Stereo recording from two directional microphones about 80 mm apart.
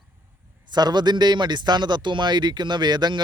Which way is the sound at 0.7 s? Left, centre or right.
Right.